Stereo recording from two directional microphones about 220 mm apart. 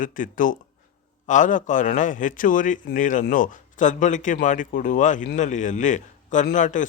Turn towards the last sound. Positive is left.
turn(degrees=35)  # may be behind; listen again after turning